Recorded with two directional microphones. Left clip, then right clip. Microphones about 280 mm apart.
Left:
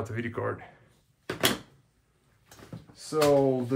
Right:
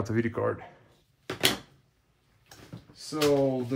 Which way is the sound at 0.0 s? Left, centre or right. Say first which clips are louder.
Right 4 dB; centre.